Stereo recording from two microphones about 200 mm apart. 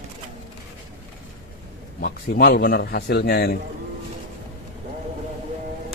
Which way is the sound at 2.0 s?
50° left (ahead or behind).